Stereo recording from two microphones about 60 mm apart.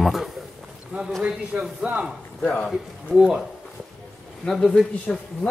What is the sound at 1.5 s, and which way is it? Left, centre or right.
Speech, centre.